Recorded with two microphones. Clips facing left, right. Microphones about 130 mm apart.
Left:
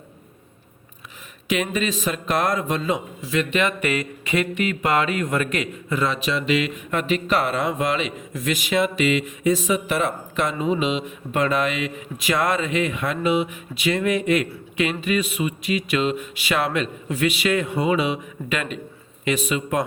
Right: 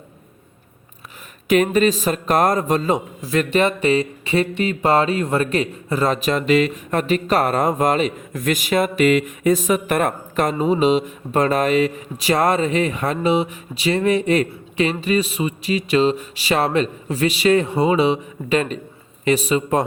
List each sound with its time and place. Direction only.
1.5 s a man's voice: 45° right (ahead or behind)